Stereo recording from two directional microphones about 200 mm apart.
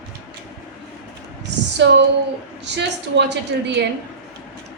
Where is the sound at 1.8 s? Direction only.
60° right (ahead or behind).